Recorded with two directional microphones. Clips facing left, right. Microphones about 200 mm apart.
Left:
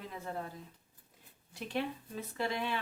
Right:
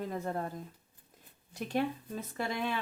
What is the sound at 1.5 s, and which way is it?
Speech, 45° right (ahead or behind).